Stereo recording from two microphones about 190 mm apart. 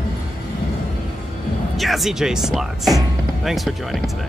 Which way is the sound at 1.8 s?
Centre (ahead or behind).